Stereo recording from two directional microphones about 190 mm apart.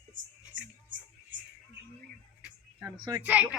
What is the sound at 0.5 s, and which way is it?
Music, 70° right (ahead or behind).